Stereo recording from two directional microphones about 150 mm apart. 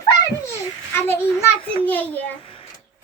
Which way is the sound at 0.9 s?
15° left (ahead or behind).